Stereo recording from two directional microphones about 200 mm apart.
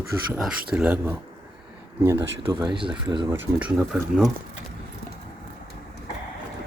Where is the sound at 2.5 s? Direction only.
20° right (ahead or behind).